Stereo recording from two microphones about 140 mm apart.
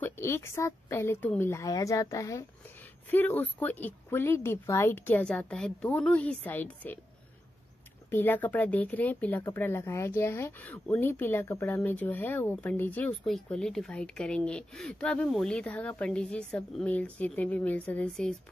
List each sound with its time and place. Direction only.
0.0 s a woman's voice: 20° left (ahead or behind)
8.1 s a woman's voice: 15° left (ahead or behind)